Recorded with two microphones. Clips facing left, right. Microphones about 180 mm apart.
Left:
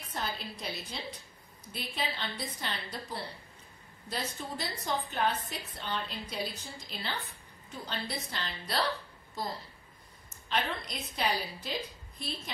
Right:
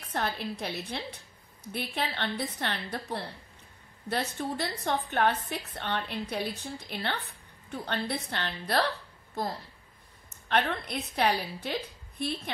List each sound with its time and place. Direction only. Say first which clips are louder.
0.1 s a woman's voice: right 6 dB; 65° right (ahead or behind)
10.5 s a woman's voice: right 5 dB; 60° right (ahead or behind)